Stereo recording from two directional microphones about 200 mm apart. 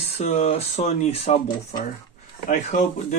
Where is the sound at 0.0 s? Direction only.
30° left (ahead or behind).